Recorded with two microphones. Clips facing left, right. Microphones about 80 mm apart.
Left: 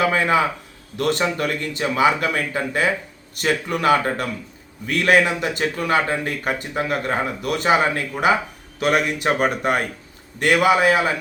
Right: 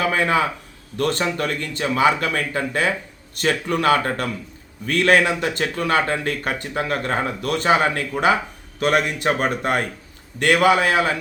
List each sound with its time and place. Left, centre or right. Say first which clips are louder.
0.0 s speech: left 1 dB; left